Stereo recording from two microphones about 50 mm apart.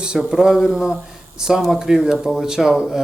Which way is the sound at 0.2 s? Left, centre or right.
Centre.